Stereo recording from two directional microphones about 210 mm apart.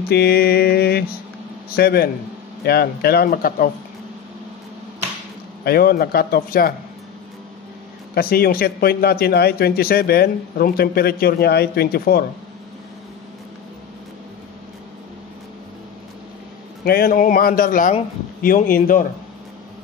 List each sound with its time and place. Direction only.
0.1 s mantra: 50° left (ahead or behind)
1.7 s a man's voice: 45° left (ahead or behind)
5.6 s a man's voice: 45° left (ahead or behind)
8.1 s a man's voice: 45° left (ahead or behind)
16.8 s a man's voice: 45° left (ahead or behind)